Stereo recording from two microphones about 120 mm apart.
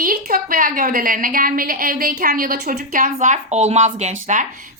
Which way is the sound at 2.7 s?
90° right.